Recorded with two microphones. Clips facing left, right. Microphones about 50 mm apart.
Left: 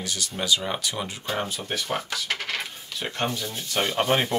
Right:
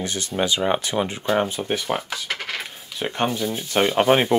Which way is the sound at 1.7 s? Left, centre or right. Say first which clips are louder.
Right 4 dB; centre.